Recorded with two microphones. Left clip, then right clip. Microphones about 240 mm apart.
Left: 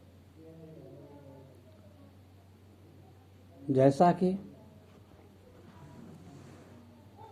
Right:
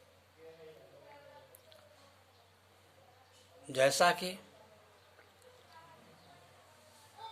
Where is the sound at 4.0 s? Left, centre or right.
Centre.